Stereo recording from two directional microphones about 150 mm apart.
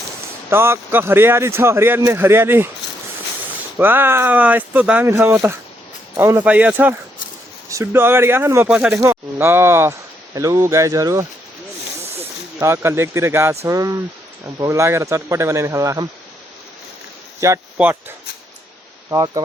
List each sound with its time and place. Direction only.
0.5 s speech: 15° right (ahead or behind)
3.8 s speech: 15° right (ahead or behind)
12.5 s speech: 20° right (ahead or behind)
17.4 s speech: 20° right (ahead or behind)
19.1 s speech: 25° right (ahead or behind)